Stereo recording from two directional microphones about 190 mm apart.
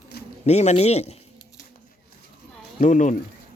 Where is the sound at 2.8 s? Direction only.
40° left (ahead or behind).